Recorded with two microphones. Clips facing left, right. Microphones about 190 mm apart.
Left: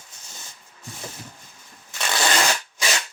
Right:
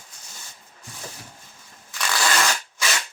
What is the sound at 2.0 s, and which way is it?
Shuffling cards, 25° left (ahead or behind).